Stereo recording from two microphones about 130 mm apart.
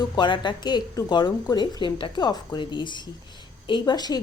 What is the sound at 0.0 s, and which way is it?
A woman's voice, 35° left (ahead or behind).